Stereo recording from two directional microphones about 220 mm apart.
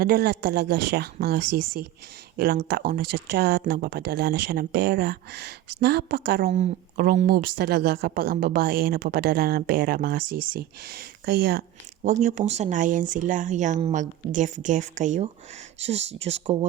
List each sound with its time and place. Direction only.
0.0 s speech: 45° right (ahead or behind); by 16.6 s 25° right (ahead or behind)